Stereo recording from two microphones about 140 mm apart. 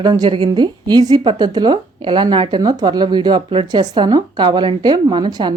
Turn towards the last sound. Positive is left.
turn(degrees=-35)  # may be behind; listen again after turning